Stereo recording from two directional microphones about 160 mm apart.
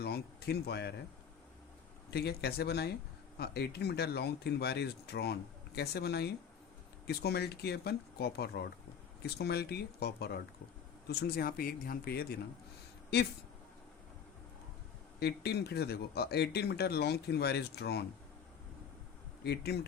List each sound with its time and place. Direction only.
0.0 s speech: 90° left
2.0 s speech: 90° left; by 12.3 s 70° left (ahead or behind)
15.2 s speech: 85° left
19.5 s speech: 90° left